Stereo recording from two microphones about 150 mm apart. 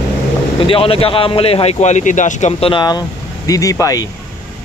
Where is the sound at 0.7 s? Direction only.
40° left (ahead or behind).